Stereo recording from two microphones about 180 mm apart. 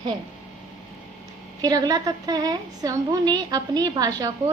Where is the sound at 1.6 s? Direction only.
20° right (ahead or behind).